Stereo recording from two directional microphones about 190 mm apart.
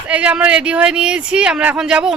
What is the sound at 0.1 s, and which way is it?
Speech, 5° right (ahead or behind).